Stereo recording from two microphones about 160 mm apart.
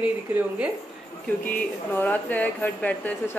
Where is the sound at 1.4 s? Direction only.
10° left (ahead or behind).